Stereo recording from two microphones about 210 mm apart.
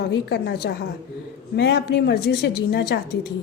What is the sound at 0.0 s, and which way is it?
Speech, 50° left (ahead or behind).